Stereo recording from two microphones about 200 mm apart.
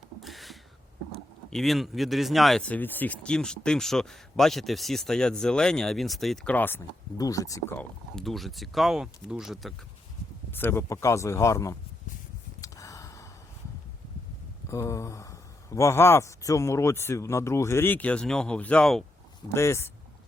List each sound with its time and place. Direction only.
0.2 s a sound: centre (ahead or behind)
1.5 s speech: centre (ahead or behind)
10.5 s speech: 10° left (ahead or behind)
12.6 s a sound: 15° left (ahead or behind)
14.7 s speech: 15° left (ahead or behind)
19.5 s speech: 15° left (ahead or behind)